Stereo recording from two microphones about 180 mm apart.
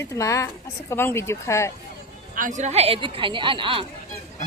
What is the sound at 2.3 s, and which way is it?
A woman's voice, 45° right (ahead or behind).